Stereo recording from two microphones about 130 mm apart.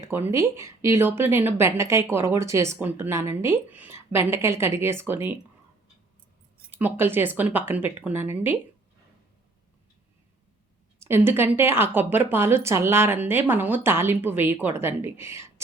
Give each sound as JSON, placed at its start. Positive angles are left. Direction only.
{"t": 0.0, "sound": "a woman's voice", "side_deg": -20}
{"t": 6.7, "sound": "a woman's voice", "side_deg": -15}
{"t": 11.0, "sound": "a woman's voice", "side_deg": -15}